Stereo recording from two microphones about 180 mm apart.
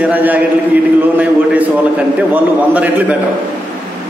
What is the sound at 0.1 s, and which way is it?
Speech, 10° right (ahead or behind).